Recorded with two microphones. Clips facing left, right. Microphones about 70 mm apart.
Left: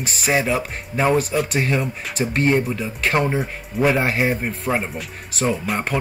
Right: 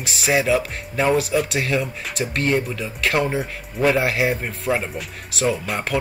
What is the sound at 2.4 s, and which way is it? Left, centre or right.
Speech, centre.